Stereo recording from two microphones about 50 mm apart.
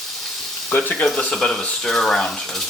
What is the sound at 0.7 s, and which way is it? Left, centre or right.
Frying, left.